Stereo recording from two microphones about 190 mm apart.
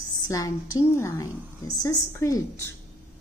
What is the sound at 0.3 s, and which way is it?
A woman's voice, 15° left (ahead or behind).